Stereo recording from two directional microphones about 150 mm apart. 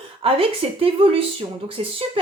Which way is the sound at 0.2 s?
40° right (ahead or behind).